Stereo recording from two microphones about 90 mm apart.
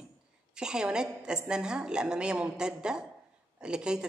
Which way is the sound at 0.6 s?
10° right (ahead or behind).